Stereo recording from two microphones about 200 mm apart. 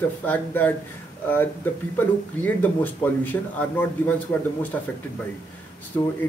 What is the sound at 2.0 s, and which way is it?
Speech, 10° left (ahead or behind).